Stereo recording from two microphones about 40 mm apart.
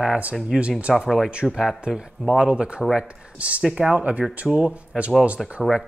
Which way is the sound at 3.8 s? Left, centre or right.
Right.